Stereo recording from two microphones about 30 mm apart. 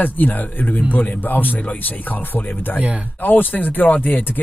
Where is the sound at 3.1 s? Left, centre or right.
Left.